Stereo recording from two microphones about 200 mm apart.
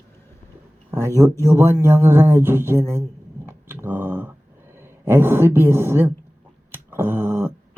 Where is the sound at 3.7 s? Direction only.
10° right (ahead or behind).